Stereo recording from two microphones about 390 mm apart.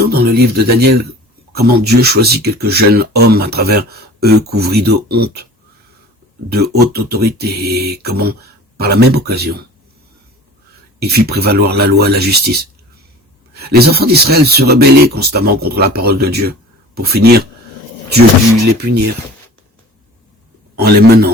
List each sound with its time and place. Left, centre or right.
0.0 s speech: right
6.5 s speech: right
11.0 s speech: right
20.7 s speech: right